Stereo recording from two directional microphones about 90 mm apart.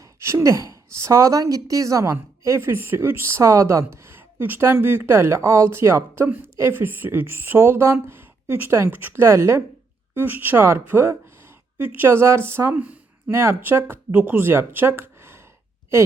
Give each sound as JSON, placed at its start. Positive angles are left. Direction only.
{"t": 0.0, "sound": "a woman's voice", "side_deg": -30}
{"t": 12.8, "sound": "a sound", "side_deg": -15}
{"t": 13.3, "sound": "speech", "side_deg": -30}